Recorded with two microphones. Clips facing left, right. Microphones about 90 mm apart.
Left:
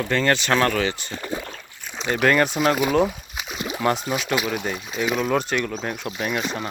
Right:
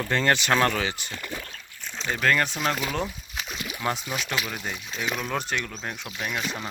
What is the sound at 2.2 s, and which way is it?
Speech, 10° left (ahead or behind).